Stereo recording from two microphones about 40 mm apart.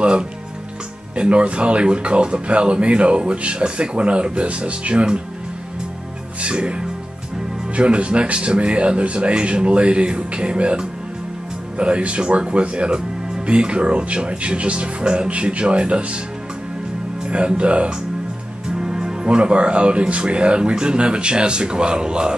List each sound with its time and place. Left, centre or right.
1.1 s speech: right
6.4 s speech: right
17.3 s speech: right
18.8 s speech: centre